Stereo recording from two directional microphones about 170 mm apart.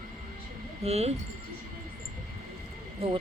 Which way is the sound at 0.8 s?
40° right (ahead or behind).